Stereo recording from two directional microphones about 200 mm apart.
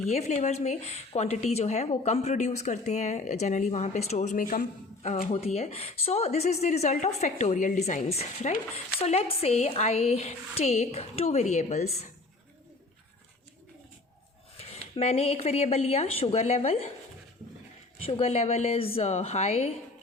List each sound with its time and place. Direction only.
0.1 s a woman's voice: 35° left (ahead or behind)
14.6 s a woman's voice: 30° left (ahead or behind)
18.0 s a woman's voice: 30° left (ahead or behind)